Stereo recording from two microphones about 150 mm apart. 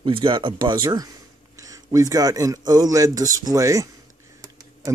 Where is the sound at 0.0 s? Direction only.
35° right (ahead or behind).